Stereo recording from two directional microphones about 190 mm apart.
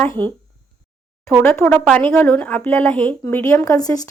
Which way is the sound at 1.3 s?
5° left (ahead or behind).